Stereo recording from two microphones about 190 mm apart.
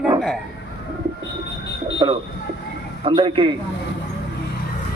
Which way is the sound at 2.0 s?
25° right (ahead or behind).